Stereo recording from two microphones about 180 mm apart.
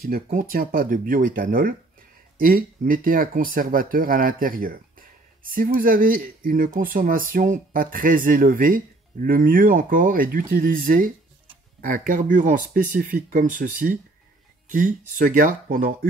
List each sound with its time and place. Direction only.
0.0 s speech: 50° right (ahead or behind)